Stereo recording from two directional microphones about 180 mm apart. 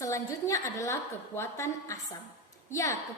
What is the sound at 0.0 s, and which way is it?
A woman's voice, 15° left (ahead or behind).